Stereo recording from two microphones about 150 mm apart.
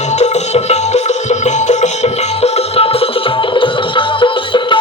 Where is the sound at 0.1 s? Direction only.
50° left (ahead or behind).